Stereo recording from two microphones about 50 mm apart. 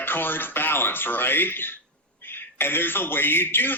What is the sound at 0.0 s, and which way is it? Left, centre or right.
A man's voice, left.